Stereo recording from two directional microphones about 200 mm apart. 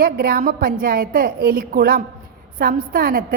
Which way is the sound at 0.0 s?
50° right (ahead or behind).